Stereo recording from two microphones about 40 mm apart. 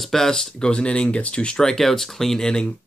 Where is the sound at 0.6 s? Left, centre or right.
Left.